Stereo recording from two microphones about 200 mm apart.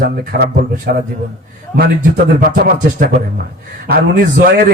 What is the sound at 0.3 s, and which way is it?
A man's voice, 45° right (ahead or behind).